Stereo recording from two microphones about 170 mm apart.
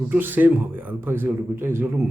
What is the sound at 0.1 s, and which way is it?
A man's voice, 10° right (ahead or behind).